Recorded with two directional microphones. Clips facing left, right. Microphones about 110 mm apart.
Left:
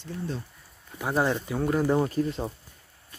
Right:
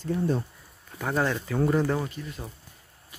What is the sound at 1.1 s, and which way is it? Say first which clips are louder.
Speech: left 1 dB; 15° left (ahead or behind).